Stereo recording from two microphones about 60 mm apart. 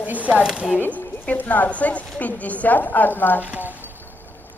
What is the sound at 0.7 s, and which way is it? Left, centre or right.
Speech, left.